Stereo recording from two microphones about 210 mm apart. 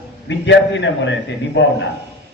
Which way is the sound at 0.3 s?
60° left (ahead or behind).